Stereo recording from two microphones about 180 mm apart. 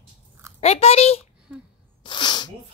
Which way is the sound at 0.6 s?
35° left (ahead or behind).